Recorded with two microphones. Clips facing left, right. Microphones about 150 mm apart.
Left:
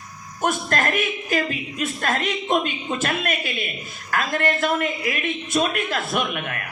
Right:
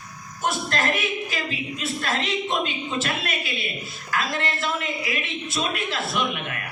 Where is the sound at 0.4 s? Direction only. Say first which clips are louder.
Left 2 dB; 50° left (ahead or behind).